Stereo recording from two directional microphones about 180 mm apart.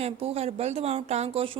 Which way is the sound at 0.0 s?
35° right (ahead or behind).